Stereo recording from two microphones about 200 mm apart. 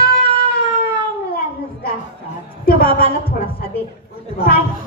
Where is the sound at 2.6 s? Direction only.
45° left (ahead or behind).